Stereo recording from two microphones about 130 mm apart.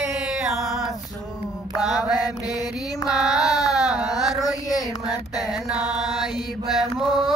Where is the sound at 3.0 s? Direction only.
5° right (ahead or behind).